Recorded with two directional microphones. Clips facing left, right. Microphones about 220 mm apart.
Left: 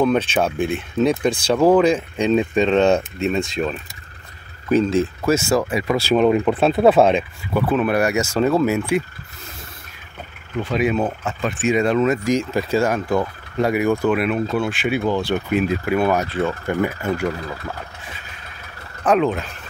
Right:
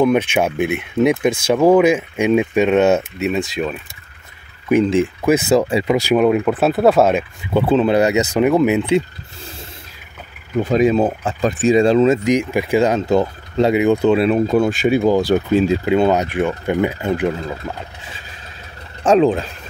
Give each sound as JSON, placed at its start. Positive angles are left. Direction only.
{"t": 0.0, "sound": "speech", "side_deg": -15}
{"t": 4.6, "sound": "speech", "side_deg": -15}
{"t": 7.5, "sound": "speech", "side_deg": -25}
{"t": 10.6, "sound": "speech", "side_deg": -40}
{"t": 12.4, "sound": "speech", "side_deg": -15}
{"t": 14.5, "sound": "speech", "side_deg": -40}
{"t": 15.6, "sound": "speech", "side_deg": -25}